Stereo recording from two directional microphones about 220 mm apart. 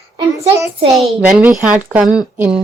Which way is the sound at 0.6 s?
25° right (ahead or behind).